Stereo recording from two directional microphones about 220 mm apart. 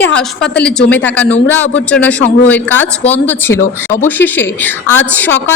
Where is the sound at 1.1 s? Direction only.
5° left (ahead or behind).